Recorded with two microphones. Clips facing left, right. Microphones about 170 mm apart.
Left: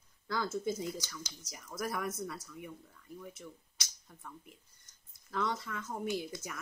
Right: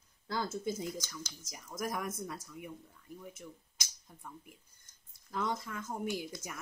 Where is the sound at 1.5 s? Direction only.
15° right (ahead or behind).